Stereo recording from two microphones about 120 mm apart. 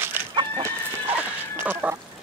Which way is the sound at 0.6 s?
15° right (ahead or behind).